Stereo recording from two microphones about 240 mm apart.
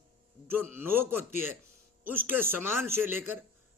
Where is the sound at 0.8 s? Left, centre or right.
Centre.